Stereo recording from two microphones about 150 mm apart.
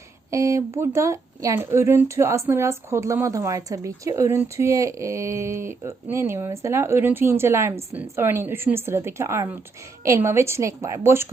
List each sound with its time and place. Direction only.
0.3 s speech: 20° right (ahead or behind)